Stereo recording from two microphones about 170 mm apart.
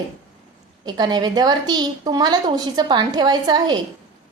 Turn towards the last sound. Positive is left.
turn(degrees=-25)  # may be behind; listen again after turning